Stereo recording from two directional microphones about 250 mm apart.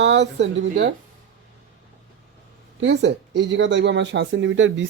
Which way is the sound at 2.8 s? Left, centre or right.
Right.